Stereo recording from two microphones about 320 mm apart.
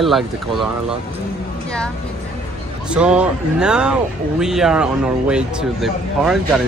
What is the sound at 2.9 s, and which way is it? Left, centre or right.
Speech, centre.